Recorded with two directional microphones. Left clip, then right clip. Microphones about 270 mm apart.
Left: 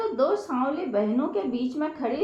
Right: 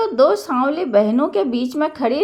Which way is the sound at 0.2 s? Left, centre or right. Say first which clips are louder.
Right 10 dB; right.